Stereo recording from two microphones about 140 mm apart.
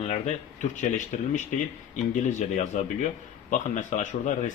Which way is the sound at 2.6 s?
65° left (ahead or behind).